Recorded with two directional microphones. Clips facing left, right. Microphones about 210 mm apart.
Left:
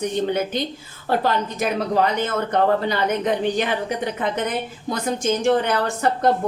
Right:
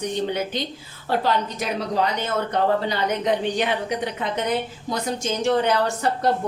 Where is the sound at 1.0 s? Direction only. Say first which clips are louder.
Left 1 dB; 50° left (ahead or behind).